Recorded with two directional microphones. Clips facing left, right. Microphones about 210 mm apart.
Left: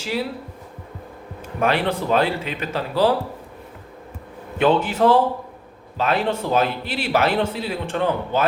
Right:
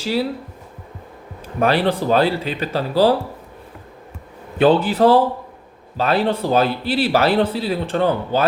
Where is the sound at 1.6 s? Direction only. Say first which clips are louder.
Right 3 dB; 35° right (ahead or behind).